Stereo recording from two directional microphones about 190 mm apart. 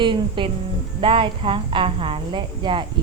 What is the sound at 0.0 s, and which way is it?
A woman's voice, 25° right (ahead or behind).